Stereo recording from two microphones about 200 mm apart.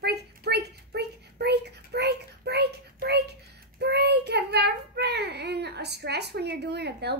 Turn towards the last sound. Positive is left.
turn(degrees=-55)  # may be behind; listen again after turning